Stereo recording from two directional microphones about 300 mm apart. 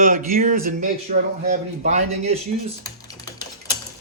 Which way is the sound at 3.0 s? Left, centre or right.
Centre.